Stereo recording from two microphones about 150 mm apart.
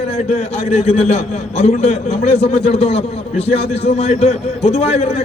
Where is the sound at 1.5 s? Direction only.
45° left (ahead or behind).